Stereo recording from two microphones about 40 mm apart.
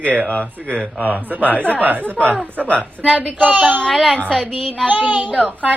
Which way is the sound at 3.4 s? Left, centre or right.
Right.